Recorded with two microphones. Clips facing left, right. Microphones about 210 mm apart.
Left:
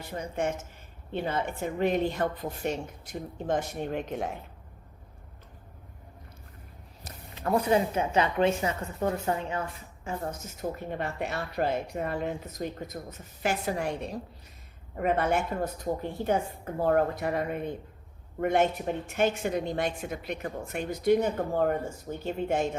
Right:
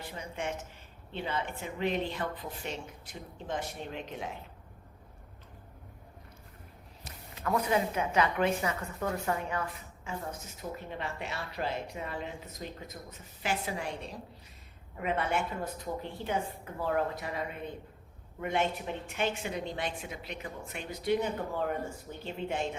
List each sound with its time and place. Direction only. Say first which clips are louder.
0.0 s a woman's voice: left 7 dB; 45° left (ahead or behind)
7.0 s speech: left 3 dB; 35° left (ahead or behind)
10.6 s a woman's voice: left 7 dB; 50° left (ahead or behind)
14.9 s a woman's voice: left 5 dB; 45° left (ahead or behind)